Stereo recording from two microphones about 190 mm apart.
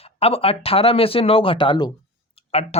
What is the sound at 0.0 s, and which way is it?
Speech, 30° left (ahead or behind).